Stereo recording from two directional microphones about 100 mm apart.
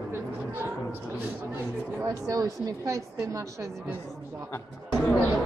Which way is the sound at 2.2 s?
35° right (ahead or behind).